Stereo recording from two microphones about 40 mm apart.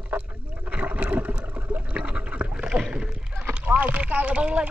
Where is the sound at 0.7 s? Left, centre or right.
Right.